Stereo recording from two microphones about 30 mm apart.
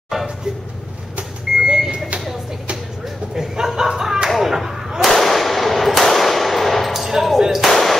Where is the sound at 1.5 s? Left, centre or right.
Centre.